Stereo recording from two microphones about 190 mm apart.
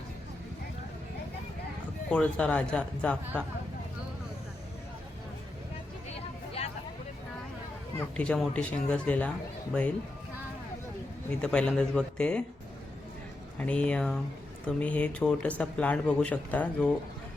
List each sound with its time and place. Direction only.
2.0 s speech: 5° left (ahead or behind)
6.6 s a sound: 30° left (ahead or behind)
7.9 s speech: 5° left (ahead or behind)
11.3 s speech: 5° left (ahead or behind)
13.6 s speech: 5° left (ahead or behind)